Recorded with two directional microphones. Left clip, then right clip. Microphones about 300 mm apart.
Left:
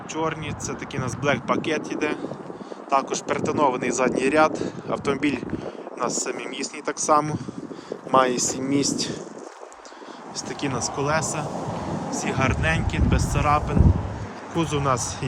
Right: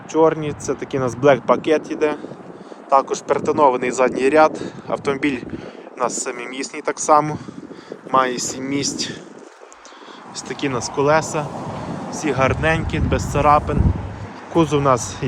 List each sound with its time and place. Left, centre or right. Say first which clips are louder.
0.1 s speech: right 11 dB; centre
10.3 s speech: right 5 dB; centre
11.6 s a sound: right 1 dB; left
12.1 s speech: right 7 dB; centre